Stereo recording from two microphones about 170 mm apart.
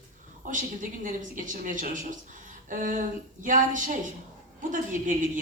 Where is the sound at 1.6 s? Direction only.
50° right (ahead or behind).